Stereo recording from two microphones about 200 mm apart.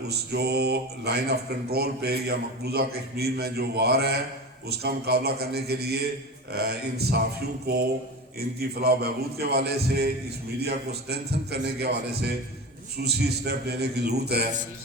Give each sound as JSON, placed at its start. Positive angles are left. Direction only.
{"t": 0.1, "sound": "speech", "side_deg": -55}
{"t": 8.4, "sound": "a man's voice", "side_deg": -50}